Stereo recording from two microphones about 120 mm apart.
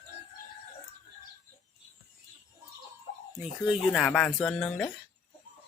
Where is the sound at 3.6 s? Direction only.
Centre (ahead or behind).